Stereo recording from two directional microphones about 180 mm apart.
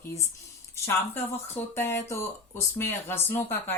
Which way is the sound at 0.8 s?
15° left (ahead or behind).